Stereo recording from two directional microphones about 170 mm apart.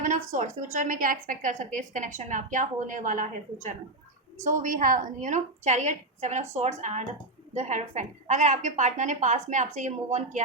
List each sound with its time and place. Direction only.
0.0 s a woman's voice: 45° right (ahead or behind)
4.6 s a woman's voice: 50° right (ahead or behind)